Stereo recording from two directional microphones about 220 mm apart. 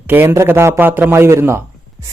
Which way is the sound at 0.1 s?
10° right (ahead or behind).